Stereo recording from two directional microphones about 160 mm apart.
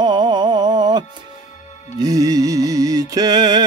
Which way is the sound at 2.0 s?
20° right (ahead or behind).